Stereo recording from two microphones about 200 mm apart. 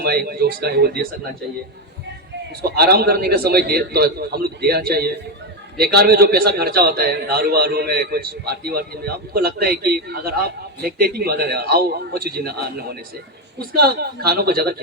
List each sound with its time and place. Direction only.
0.0 s a man's voice: 50° right (ahead or behind)
2.6 s a man's voice: 50° right (ahead or behind)